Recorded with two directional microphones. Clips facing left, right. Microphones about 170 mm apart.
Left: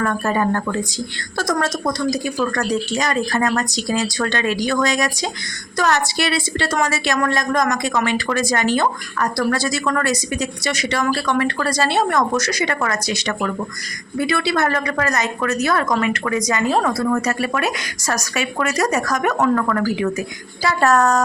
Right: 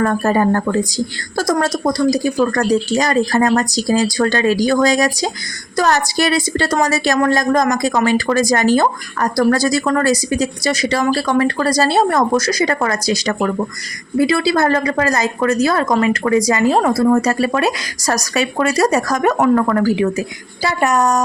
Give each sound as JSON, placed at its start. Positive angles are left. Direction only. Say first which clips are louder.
{"t": 0.0, "sound": "a woman's voice", "louder": "right 5 dB", "side_deg": -35}